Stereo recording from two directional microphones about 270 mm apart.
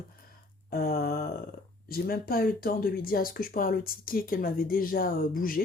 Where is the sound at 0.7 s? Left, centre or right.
Left.